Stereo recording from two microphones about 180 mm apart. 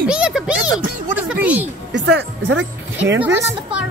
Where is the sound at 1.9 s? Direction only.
80° right.